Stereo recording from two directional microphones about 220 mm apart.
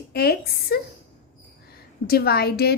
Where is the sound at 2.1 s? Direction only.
45° left (ahead or behind).